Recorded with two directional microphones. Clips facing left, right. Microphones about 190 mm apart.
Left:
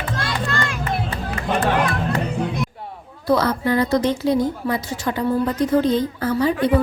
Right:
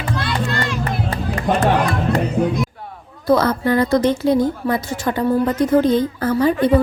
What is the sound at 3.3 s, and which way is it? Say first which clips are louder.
A woman's voice: right 3 dB; 50° right (ahead or behind).